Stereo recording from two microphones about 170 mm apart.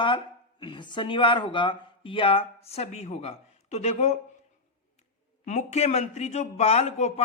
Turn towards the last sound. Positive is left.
turn(degrees=40)  # may be behind; listen again after turning